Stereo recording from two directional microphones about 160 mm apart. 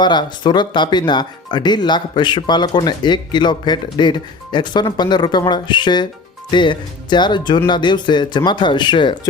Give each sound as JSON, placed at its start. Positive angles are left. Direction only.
{"t": 0.0, "sound": "speech", "side_deg": 30}